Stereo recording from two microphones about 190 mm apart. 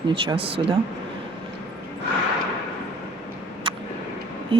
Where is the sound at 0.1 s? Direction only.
30° right (ahead or behind).